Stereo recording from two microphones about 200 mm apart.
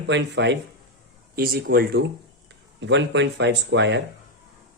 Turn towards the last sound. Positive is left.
turn(degrees=-65)  # may be behind; listen again after turning